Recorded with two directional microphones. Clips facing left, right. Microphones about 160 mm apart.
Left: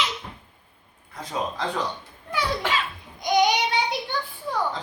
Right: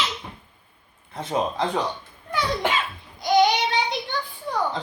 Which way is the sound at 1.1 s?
25° right (ahead or behind).